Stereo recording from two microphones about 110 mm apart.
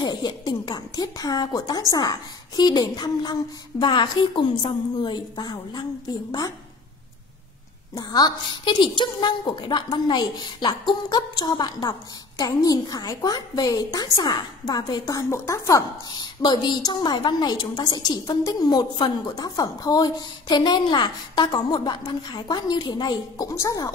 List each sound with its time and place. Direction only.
0.0 s a woman's voice: 40° left (ahead or behind)
7.9 s a woman's voice: 35° left (ahead or behind)
16.2 s a woman's voice: 40° left (ahead or behind)